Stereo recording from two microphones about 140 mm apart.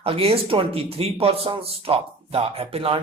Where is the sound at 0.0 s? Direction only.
40° right (ahead or behind).